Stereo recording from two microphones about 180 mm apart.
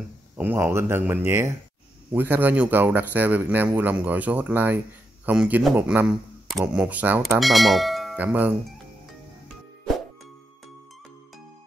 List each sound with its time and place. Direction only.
0.4 s speech: 10° right (ahead or behind)
7.3 s speech: centre (ahead or behind)